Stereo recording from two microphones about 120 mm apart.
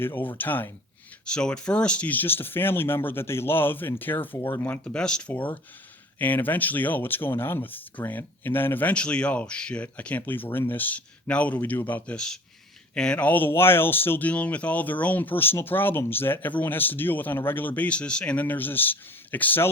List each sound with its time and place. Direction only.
0.0 s speech: 15° left (ahead or behind)